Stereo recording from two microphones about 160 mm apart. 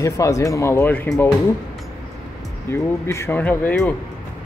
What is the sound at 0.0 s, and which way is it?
Speech, 20° left (ahead or behind).